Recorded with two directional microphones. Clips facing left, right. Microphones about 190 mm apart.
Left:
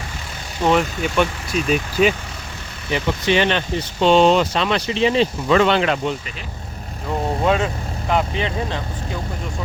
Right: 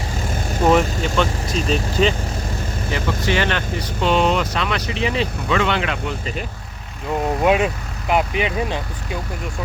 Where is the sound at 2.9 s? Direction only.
20° left (ahead or behind); by 5.9 s 35° left (ahead or behind).